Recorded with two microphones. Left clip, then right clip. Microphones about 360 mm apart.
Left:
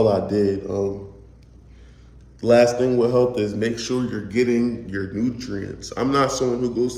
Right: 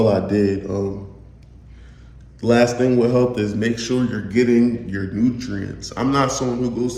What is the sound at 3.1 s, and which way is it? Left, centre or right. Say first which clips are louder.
Speech: even; centre.